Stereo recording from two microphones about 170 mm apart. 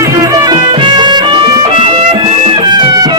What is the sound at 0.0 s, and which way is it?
Music, 20° right (ahead or behind).